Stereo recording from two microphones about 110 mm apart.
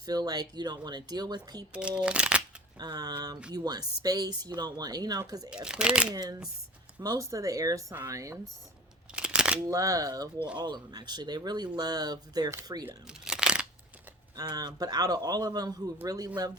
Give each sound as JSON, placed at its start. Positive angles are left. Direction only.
{"t": 0.0, "sound": "speech", "side_deg": -40}
{"t": 1.7, "sound": "speech", "side_deg": -10}
{"t": 2.7, "sound": "speech", "side_deg": -40}
{"t": 5.6, "sound": "speech", "side_deg": -10}
{"t": 6.1, "sound": "speech", "side_deg": -35}
{"t": 9.1, "sound": "a sound", "side_deg": -10}
{"t": 9.6, "sound": "speech", "side_deg": -30}
{"t": 13.2, "sound": "a sound", "side_deg": -5}
{"t": 14.3, "sound": "speech", "side_deg": -35}